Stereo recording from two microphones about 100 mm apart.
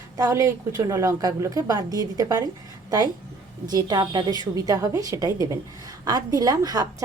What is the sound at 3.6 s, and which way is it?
A woman's voice, 40° right (ahead or behind).